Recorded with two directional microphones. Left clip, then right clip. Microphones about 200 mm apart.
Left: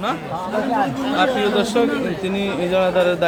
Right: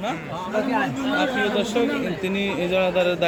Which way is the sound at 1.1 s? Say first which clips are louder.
Left 5 dB; 5° left (ahead or behind).